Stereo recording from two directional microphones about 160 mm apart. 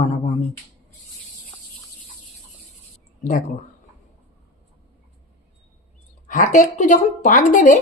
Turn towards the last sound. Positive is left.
turn(degrees=55)  # may be behind; listen again after turning